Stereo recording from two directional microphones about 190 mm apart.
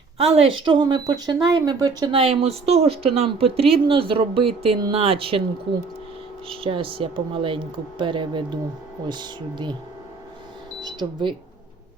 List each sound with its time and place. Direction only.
0.2 s speech: 30° right (ahead or behind)
6.5 s speech: 25° right (ahead or behind)
10.8 s speech: 25° right (ahead or behind)